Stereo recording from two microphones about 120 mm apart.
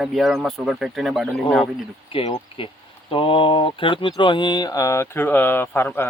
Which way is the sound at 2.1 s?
50° left (ahead or behind).